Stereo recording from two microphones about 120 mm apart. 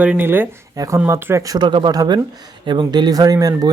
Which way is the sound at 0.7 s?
30° right (ahead or behind).